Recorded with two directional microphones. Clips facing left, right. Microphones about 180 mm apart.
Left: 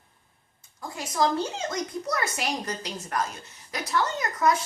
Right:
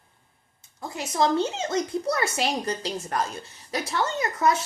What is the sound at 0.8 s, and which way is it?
A woman's voice, 25° right (ahead or behind).